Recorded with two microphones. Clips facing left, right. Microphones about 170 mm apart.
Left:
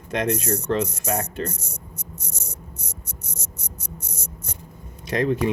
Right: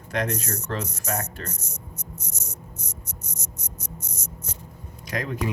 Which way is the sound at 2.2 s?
30° left (ahead or behind).